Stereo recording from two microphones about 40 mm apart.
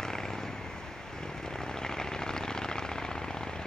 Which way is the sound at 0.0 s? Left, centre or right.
Centre.